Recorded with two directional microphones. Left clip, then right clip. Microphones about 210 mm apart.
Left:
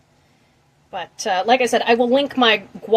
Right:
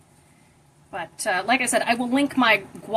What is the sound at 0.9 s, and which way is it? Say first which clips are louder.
A woman's voice: left 4 dB; 50° left (ahead or behind).